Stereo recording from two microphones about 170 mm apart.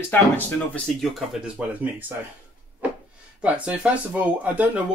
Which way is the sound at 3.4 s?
5° right (ahead or behind).